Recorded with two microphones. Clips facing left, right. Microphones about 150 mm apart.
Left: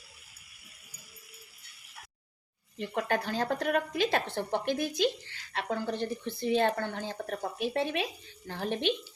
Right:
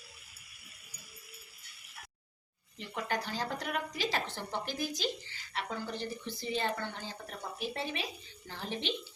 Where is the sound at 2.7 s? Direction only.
60° left (ahead or behind).